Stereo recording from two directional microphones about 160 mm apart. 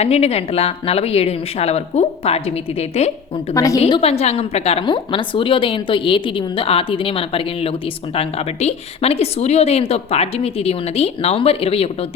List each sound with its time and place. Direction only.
0.0 s a woman's voice: 40° left (ahead or behind)
3.5 s a woman's voice: 20° left (ahead or behind); by 11.9 s 35° left (ahead or behind)